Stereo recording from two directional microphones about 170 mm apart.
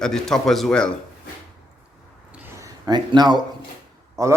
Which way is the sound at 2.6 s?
25° right (ahead or behind).